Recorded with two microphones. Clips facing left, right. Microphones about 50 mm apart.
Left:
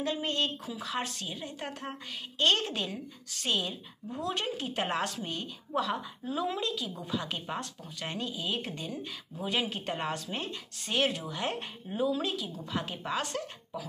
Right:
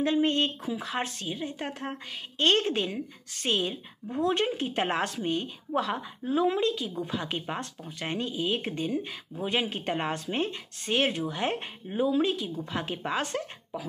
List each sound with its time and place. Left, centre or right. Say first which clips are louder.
0.0 s speech: right 6 dB; right